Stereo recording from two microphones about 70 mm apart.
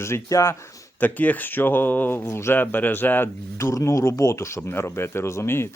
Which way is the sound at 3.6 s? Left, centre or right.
Left.